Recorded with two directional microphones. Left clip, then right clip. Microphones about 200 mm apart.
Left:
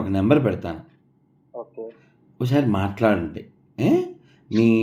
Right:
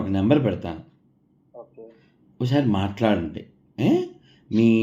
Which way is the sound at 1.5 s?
25° left (ahead or behind).